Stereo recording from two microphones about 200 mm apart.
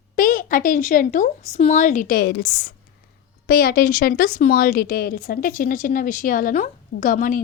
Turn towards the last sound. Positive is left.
turn(degrees=45)  # may be behind; listen again after turning